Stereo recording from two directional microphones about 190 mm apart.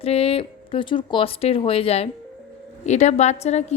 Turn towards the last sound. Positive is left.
turn(degrees=35)  # may be behind; listen again after turning